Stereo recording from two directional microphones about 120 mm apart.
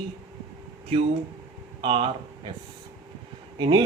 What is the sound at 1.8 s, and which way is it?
Speech, 45° right (ahead or behind).